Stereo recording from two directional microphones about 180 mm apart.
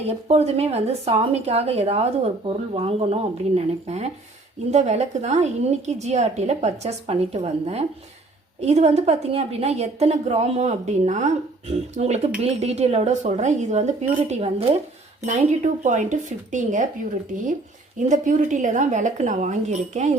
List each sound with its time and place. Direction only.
0.0 s a woman's voice: 35° right (ahead or behind)
18.1 s a woman's voice: 45° right (ahead or behind)